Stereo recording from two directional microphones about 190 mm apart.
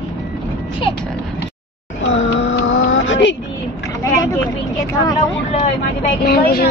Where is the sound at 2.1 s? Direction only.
75° left (ahead or behind).